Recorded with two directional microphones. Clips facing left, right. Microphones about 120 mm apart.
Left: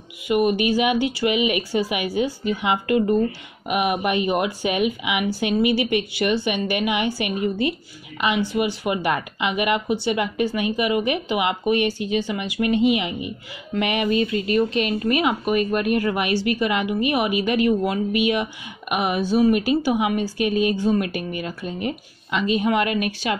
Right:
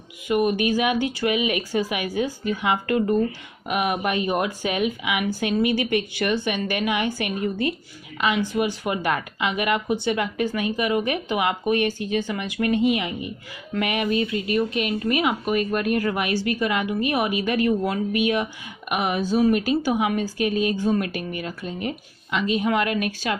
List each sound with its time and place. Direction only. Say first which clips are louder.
0.3 s a woman's voice: left 2 dB; 15° left (ahead or behind)
8.5 s a woman's voice: left 1 dB; 15° left (ahead or behind)